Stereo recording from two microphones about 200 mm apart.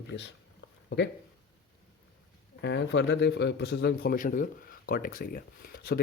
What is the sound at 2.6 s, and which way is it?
Speech, 65° left (ahead or behind).